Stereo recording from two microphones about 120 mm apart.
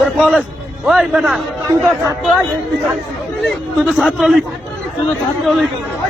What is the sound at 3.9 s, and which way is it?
Speech, centre (ahead or behind).